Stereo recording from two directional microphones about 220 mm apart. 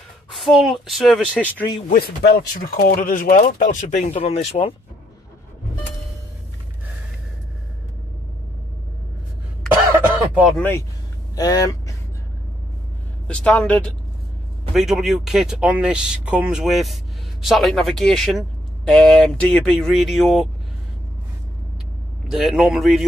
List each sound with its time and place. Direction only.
0.3 s speech: centre (ahead or behind)
1.9 s speech: 45° left (ahead or behind); by 4.7 s 25° left (ahead or behind)
10.6 s speech: 10° left (ahead or behind)
13.3 s speech: 5° left (ahead or behind)
22.3 s speech: centre (ahead or behind)